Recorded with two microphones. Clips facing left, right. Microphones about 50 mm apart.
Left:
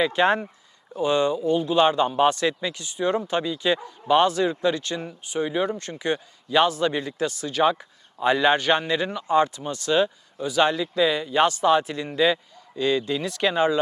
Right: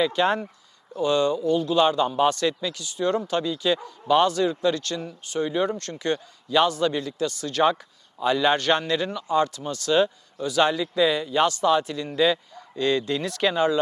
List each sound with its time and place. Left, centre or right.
0.0 s speech: centre
6.9 s speech: left
7.3 s speech: centre
8.2 s speech: left
11.4 s speech: left; by 13.6 s centre